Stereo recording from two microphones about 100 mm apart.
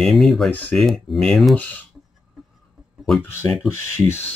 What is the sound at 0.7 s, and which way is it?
Speech, centre (ahead or behind).